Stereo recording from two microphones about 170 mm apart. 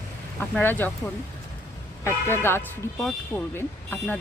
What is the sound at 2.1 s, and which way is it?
Speech, 15° left (ahead or behind).